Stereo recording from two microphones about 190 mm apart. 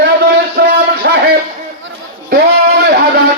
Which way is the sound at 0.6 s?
55° right (ahead or behind).